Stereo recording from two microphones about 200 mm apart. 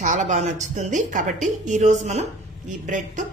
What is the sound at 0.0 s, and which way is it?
A woman's voice, 40° right (ahead or behind).